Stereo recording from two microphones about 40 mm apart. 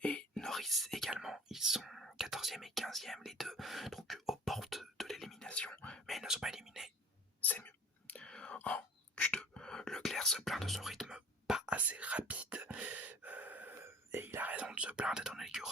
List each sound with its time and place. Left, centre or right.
0.0 s whispering: left
0.3 s whispering: centre
5.5 s whispering: left
6.2 s whispering: centre
8.0 s whispering: left
8.3 s whispering: left
10.0 s whispering: centre
11.1 s whispering: centre
11.9 s beatboxing: right
12.6 s gasp: right
13.8 s whispering: right
14.4 s whispering: right; by 15.3 s centre
15.3 s whispering: centre